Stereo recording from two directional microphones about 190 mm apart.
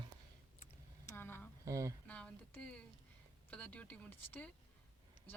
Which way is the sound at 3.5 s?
5° left (ahead or behind).